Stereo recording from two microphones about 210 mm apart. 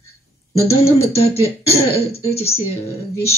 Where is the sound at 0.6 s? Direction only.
30° left (ahead or behind).